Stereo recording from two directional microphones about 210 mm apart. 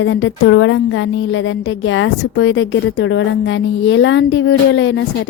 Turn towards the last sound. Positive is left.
turn(degrees=60)  # may be behind; listen again after turning